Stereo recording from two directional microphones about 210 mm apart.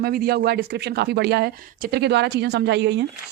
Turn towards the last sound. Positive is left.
turn(degrees=-55)  # may be behind; listen again after turning